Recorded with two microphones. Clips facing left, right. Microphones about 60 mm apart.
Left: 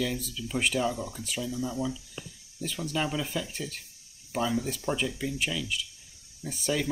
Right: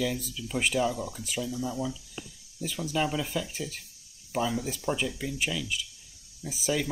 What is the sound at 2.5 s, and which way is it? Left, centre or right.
Speech, centre.